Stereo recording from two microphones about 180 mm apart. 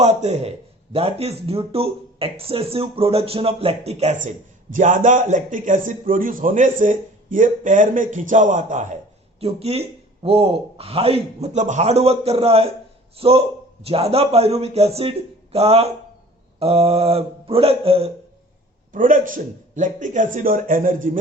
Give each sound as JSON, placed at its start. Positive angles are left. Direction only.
{"t": 0.0, "sound": "a man's voice", "side_deg": -40}
{"t": 4.7, "sound": "a man's voice", "side_deg": -45}
{"t": 18.9, "sound": "a man's voice", "side_deg": -45}